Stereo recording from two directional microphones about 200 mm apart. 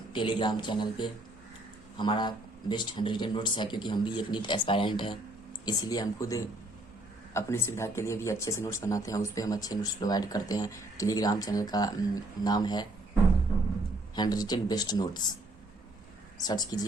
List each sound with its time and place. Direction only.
0.1 s a man's voice: 25° left (ahead or behind)
14.2 s a man's voice: 20° left (ahead or behind)
16.4 s a man's voice: 20° left (ahead or behind)